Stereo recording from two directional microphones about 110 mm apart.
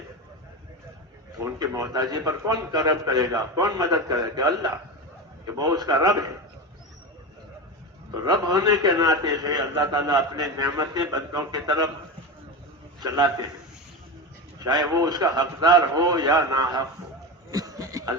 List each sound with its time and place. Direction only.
1.5 s a man's voice: 35° right (ahead or behind)
8.1 s a man's voice: 35° right (ahead or behind)
13.0 s a man's voice: 40° right (ahead or behind)
14.6 s a man's voice: 35° right (ahead or behind)
17.5 s chuckle: 30° right (ahead or behind)